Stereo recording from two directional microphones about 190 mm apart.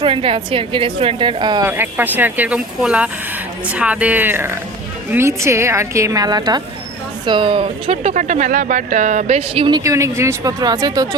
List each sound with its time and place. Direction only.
0.0 s speech: 30° right (ahead or behind)
1.6 s speech: 10° right (ahead or behind)